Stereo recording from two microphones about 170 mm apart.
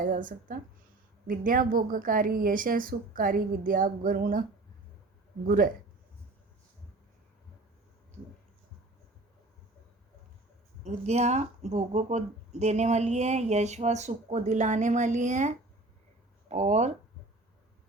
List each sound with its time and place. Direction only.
0.0 s a woman's voice: 50° right (ahead or behind)
5.5 s a woman's voice: 55° right (ahead or behind)
10.8 s speech: 40° right (ahead or behind)